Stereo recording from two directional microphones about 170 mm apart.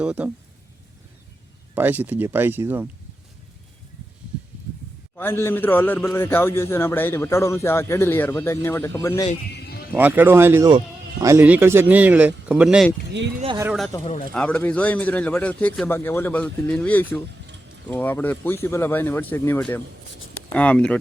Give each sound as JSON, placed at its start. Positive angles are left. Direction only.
{"t": 0.0, "sound": "speech", "side_deg": -5}
{"t": 1.7, "sound": "speech", "side_deg": -10}
{"t": 5.1, "sound": "a man's voice", "side_deg": 15}
{"t": 9.5, "sound": "music", "side_deg": 70}
{"t": 9.9, "sound": "speech", "side_deg": -10}
{"t": 14.0, "sound": "speech", "side_deg": 50}
{"t": 14.3, "sound": "a man's voice", "side_deg": 10}